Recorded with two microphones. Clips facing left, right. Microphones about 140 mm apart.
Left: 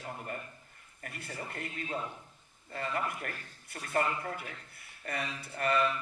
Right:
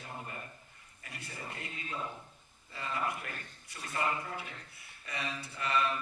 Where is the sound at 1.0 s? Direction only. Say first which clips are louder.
Left 3 dB; 55° left (ahead or behind).